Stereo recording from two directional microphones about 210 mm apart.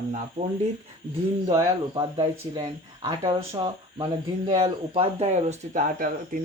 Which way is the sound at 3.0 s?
25° right (ahead or behind).